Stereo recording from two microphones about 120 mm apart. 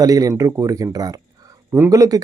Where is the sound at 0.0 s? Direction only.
30° right (ahead or behind).